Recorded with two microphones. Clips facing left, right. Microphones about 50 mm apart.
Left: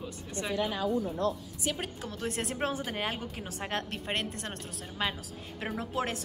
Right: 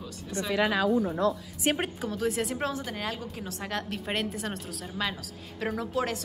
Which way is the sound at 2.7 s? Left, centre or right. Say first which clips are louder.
Even; left.